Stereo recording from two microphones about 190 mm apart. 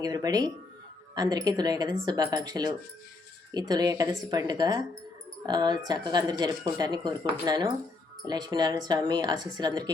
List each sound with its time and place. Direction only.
0.0 s speech: 20° right (ahead or behind)